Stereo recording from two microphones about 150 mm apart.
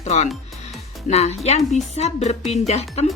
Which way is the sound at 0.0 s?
50° left (ahead or behind).